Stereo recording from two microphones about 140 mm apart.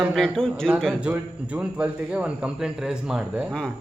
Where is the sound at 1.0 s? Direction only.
10° right (ahead or behind).